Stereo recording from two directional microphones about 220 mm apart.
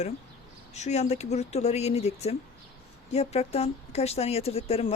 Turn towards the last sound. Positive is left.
turn(degrees=25)  # may be behind; listen again after turning